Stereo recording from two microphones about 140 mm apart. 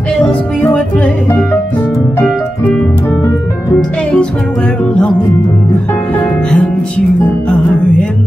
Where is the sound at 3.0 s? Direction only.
20° left (ahead or behind).